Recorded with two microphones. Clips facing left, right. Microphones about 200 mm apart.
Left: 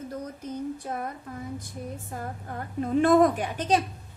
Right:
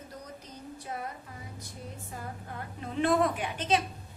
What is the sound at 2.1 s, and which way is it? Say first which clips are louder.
A woman's voice: left 3 dB; 45° left (ahead or behind).